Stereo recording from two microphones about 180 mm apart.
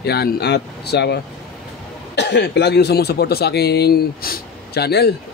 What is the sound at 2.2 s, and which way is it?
Speech, 65° left (ahead or behind).